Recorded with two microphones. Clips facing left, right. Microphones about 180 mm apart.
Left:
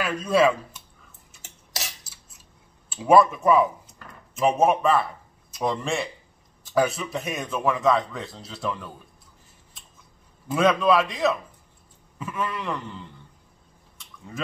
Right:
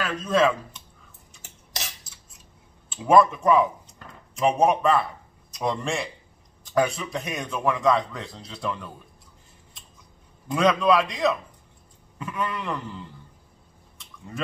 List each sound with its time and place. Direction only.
0.0 s speech: 10° left (ahead or behind)
2.9 s a man's voice: 5° left (ahead or behind)
10.5 s a man's voice: 5° left (ahead or behind)